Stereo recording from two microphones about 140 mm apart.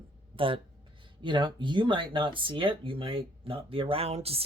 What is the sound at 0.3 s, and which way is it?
Speech, 40° right (ahead or behind).